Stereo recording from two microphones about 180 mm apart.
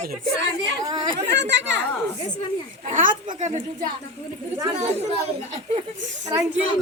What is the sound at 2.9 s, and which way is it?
A woman's voice, 45° right (ahead or behind).